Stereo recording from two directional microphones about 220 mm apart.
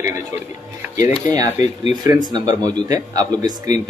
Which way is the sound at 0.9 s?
30° left (ahead or behind).